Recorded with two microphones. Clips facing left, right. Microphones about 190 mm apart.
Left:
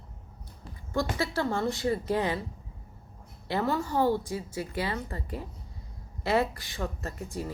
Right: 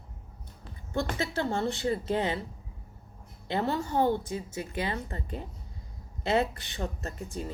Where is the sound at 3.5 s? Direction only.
25° right (ahead or behind).